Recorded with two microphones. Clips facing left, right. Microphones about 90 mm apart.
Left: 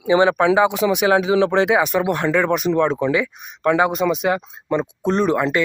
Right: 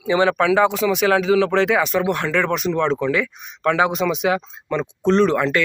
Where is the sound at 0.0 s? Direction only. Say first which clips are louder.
Left 2 dB; 20° left (ahead or behind); by 4.4 s centre (ahead or behind).